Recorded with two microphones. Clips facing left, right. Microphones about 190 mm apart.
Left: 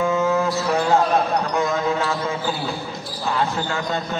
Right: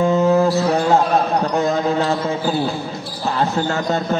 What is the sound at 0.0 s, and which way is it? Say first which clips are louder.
Music: right 5 dB; 35° right (ahead or behind).